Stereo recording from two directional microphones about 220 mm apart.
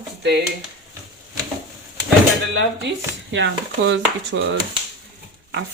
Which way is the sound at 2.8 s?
55° right (ahead or behind).